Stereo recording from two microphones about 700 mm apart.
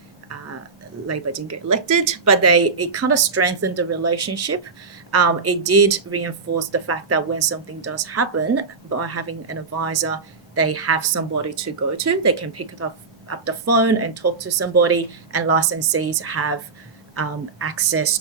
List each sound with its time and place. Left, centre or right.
1.0 s speech: right